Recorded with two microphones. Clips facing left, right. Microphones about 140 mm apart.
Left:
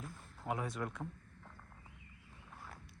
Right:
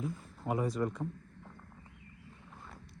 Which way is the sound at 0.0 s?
Centre (ahead or behind).